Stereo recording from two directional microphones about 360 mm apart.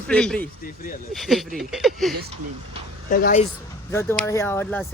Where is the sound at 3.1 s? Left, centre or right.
Left.